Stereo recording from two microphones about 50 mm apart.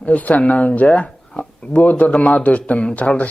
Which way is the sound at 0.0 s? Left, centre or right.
Left.